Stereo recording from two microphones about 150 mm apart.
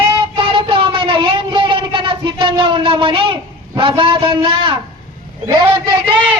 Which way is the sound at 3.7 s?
35° right (ahead or behind).